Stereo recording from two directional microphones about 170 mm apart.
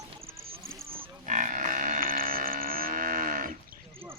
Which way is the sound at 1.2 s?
50° right (ahead or behind).